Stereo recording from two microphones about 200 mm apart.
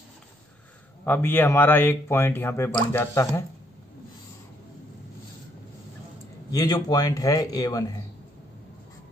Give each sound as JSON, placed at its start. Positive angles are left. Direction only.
{"t": 1.0, "sound": "speech", "side_deg": 10}
{"t": 6.5, "sound": "a man's voice", "side_deg": 20}